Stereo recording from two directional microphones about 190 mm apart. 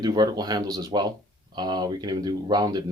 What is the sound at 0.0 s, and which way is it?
Speech, 20° right (ahead or behind).